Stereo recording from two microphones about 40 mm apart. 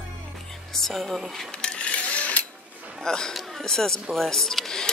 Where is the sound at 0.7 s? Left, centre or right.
Centre.